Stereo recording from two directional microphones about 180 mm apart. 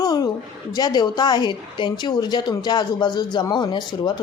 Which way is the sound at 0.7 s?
20° left (ahead or behind).